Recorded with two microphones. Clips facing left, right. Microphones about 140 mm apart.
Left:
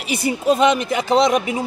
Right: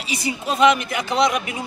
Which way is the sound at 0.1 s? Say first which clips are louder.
Left 7 dB; 55° left (ahead or behind).